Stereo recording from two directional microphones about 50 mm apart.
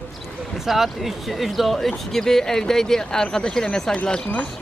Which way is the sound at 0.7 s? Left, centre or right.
Centre.